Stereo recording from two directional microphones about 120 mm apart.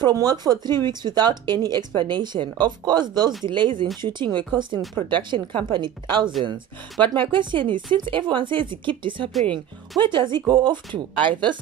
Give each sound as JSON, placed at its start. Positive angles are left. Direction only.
{"t": 0.0, "sound": "a woman's voice", "side_deg": -35}